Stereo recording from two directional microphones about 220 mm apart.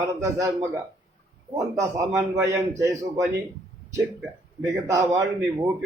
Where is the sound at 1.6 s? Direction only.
15° right (ahead or behind).